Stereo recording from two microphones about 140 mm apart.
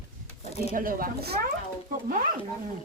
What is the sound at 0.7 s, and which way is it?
Speech, 85° right.